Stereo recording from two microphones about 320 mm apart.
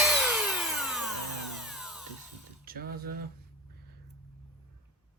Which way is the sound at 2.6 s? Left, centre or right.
Right.